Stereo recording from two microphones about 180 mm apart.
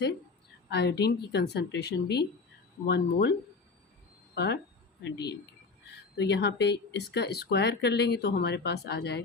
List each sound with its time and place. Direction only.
0.7 s speech: 70° left (ahead or behind)
4.4 s speech: 70° left (ahead or behind)
6.1 s speech: 70° left (ahead or behind)